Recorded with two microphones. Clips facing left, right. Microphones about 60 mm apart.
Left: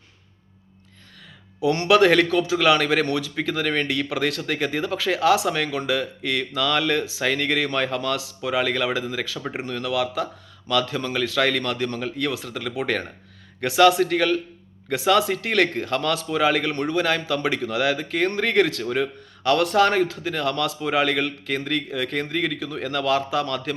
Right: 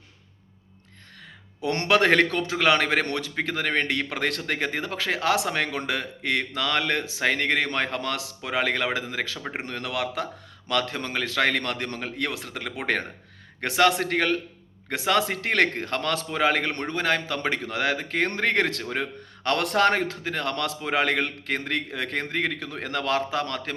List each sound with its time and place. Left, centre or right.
1.6 s speech: right
1.9 s a man's voice: right
11.6 s a man's voice: right
19.4 s a man's voice: right